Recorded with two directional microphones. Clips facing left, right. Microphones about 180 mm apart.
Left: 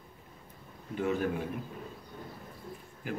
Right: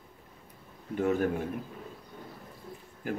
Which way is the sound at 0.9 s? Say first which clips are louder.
Right 3 dB; 50° right (ahead or behind).